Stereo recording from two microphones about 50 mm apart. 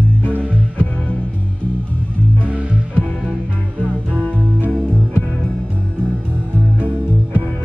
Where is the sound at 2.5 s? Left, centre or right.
Right.